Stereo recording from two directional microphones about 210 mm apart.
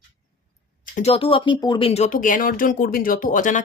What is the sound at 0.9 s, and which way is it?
Speech, 30° left (ahead or behind).